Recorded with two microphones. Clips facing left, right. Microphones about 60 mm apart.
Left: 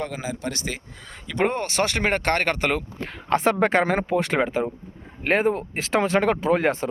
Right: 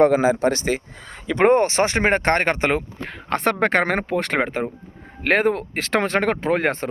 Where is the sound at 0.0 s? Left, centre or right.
Right.